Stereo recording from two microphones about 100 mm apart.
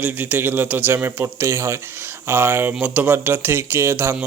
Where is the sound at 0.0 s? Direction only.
20° right (ahead or behind).